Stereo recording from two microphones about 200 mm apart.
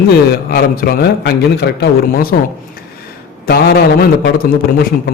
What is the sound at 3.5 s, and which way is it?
Speech, 50° left (ahead or behind).